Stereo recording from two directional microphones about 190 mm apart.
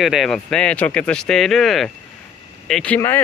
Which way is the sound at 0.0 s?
Centre (ahead or behind).